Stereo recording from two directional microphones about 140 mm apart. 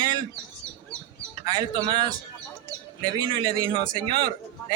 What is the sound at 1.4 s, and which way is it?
A man's voice, 35° right (ahead or behind).